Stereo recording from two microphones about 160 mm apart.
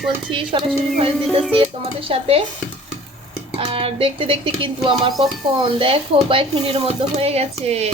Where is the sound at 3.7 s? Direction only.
35° right (ahead or behind).